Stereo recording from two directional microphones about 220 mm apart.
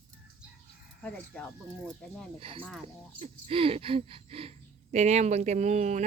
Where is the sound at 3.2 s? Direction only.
25° right (ahead or behind).